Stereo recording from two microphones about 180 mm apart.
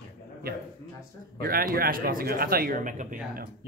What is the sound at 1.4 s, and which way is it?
Speech, 55° right (ahead or behind).